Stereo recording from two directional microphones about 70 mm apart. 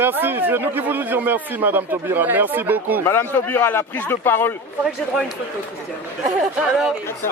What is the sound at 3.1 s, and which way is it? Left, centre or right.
Speech, left.